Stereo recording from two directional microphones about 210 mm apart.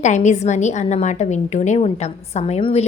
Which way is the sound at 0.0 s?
35° left (ahead or behind).